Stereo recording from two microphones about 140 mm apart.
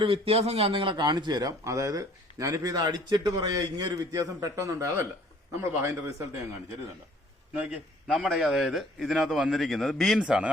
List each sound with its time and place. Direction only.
0.0 s speech: 40° right (ahead or behind); by 6.4 s 20° right (ahead or behind)
7.5 s a man's voice: 10° right (ahead or behind)